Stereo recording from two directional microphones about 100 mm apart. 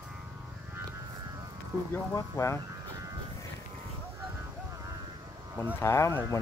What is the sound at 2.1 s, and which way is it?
Speech, 30° left (ahead or behind).